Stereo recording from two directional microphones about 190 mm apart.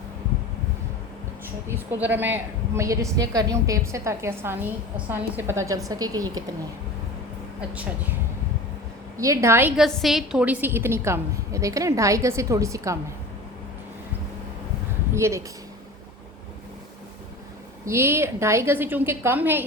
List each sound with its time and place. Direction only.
1.6 s a woman's voice: 10° right (ahead or behind)
9.1 s a woman's voice: 15° right (ahead or behind)
15.1 s a sound: 15° right (ahead or behind)
17.8 s a woman's voice: 15° right (ahead or behind)